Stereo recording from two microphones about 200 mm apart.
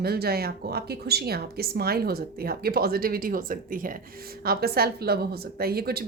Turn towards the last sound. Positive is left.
turn(degrees=-50)  # may be behind; listen again after turning